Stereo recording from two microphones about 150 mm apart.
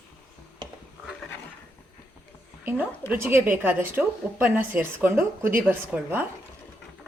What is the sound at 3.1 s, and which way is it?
A woman's voice, 15° right (ahead or behind).